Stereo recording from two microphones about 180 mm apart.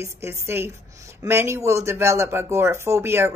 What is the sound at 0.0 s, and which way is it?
A woman's voice, 15° right (ahead or behind).